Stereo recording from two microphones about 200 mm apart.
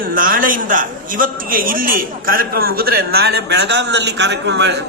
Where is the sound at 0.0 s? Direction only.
45° right (ahead or behind).